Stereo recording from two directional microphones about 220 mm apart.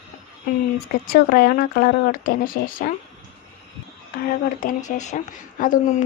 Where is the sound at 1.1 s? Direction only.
40° left (ahead or behind).